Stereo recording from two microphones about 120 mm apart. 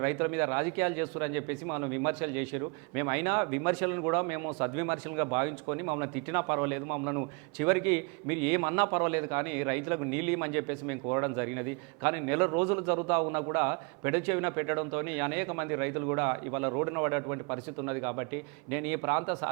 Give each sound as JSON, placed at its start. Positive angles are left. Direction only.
{"t": 0.0, "sound": "a man's voice", "side_deg": -20}